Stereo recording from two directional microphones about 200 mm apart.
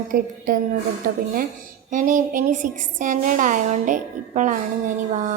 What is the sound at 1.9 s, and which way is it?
A woman's voice, 40° right (ahead or behind).